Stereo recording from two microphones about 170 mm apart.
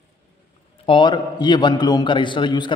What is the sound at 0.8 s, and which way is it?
A man's voice, 25° left (ahead or behind).